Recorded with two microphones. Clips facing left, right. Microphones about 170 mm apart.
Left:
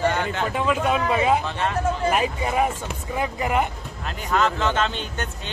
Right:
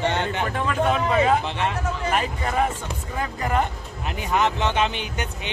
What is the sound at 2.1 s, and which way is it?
Speech, 10° left (ahead or behind).